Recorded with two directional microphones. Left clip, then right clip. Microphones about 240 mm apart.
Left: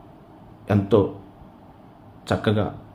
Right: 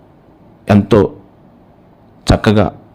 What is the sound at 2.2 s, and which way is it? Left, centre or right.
Speech, right.